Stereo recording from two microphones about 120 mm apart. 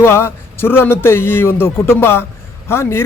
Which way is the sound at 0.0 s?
20° left (ahead or behind).